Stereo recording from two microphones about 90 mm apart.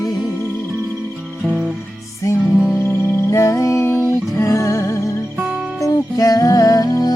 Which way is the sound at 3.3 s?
35° left (ahead or behind).